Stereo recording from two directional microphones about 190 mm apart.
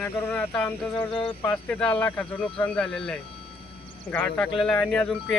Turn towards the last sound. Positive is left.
turn(degrees=5)  # may be behind; listen again after turning